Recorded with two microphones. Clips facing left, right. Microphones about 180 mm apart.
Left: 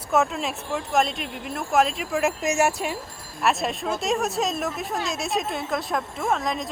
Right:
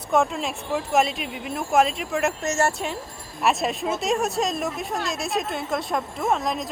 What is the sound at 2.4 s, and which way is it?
Speech, 15° left (ahead or behind).